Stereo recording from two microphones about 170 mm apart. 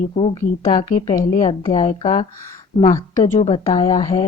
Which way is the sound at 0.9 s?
50° left (ahead or behind).